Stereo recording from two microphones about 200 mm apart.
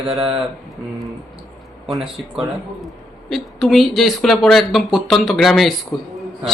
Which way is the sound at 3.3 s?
Centre (ahead or behind).